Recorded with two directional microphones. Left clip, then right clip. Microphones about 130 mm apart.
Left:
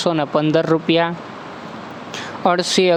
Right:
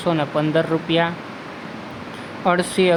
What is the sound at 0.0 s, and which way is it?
Speech, 50° left (ahead or behind).